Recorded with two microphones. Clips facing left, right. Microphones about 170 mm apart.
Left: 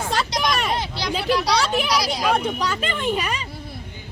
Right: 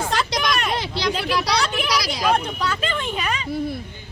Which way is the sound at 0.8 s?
85° right.